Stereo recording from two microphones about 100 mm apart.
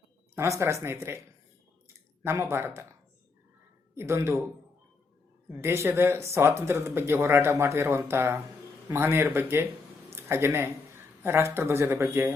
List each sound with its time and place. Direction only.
0.3 s speech: 30° right (ahead or behind)
2.2 s speech: 25° right (ahead or behind)
3.9 s speech: 30° right (ahead or behind)
5.5 s speech: 25° right (ahead or behind)